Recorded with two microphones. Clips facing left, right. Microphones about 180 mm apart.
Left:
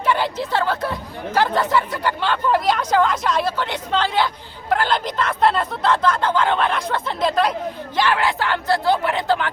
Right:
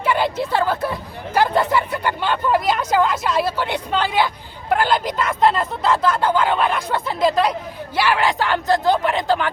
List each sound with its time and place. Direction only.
0.0 s speech: 15° right (ahead or behind)
7.9 s speech: 10° right (ahead or behind)